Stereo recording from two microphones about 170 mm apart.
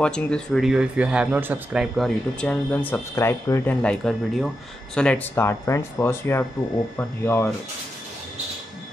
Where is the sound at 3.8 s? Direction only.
5° left (ahead or behind).